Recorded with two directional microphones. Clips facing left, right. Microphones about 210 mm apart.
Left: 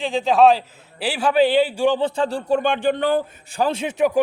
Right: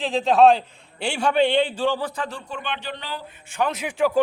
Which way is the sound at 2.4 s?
45° left (ahead or behind).